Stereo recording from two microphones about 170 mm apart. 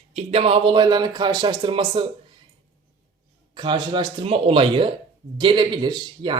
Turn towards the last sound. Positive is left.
turn(degrees=-25)  # may be behind; listen again after turning